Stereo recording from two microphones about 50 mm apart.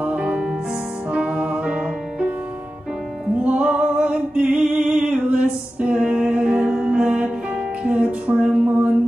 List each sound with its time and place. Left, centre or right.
0.1 s music: centre
3.3 s music: right